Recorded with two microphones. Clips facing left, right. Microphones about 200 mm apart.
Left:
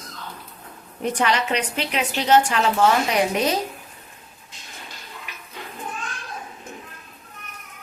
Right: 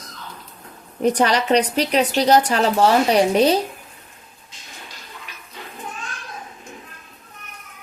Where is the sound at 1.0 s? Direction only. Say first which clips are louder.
Right 5 dB; 40° right (ahead or behind).